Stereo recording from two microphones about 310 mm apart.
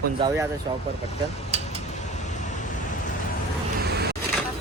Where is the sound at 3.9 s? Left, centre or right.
Right.